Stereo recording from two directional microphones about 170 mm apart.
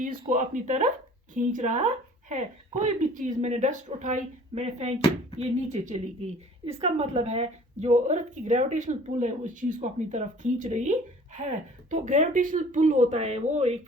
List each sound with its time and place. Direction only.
0.0 s a woman's voice: 55° right (ahead or behind)